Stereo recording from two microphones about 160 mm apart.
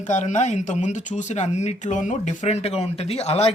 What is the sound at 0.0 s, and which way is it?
Speech, 50° left (ahead or behind).